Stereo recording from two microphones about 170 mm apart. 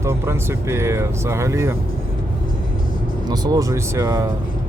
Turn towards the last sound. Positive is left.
turn(degrees=-20)  # may be behind; listen again after turning